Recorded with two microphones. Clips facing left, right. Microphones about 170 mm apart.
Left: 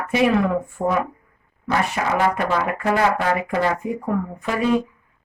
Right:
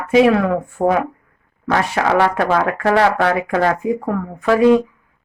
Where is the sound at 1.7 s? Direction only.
90° right.